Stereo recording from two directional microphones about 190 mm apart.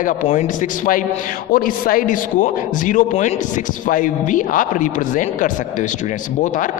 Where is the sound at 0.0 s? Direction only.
40° left (ahead or behind).